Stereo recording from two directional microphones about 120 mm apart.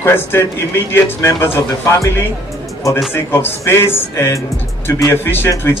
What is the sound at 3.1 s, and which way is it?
A man's voice, 20° left (ahead or behind).